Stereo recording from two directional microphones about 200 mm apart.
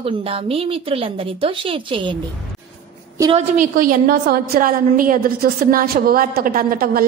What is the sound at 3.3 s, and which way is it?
A woman's voice, 40° right (ahead or behind).